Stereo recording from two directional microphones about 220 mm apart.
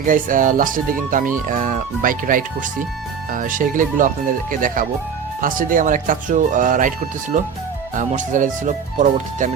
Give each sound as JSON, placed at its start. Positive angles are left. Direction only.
{"t": 0.0, "sound": "speech", "side_deg": -40}